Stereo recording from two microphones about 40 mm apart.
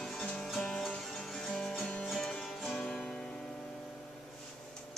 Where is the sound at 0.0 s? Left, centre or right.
Centre.